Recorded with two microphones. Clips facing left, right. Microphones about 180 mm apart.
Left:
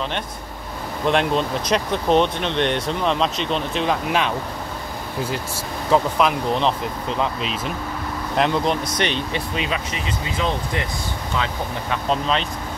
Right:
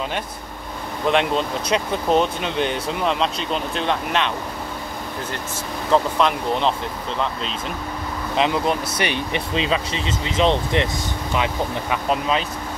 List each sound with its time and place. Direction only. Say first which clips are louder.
1.0 s speech: even; centre (ahead or behind)
5.9 s speech: even; 5° left (ahead or behind)
8.4 s speech: even; 5° right (ahead or behind)
9.6 s speech: right 3 dB; 30° right (ahead or behind); by 12.4 s 10° right (ahead or behind)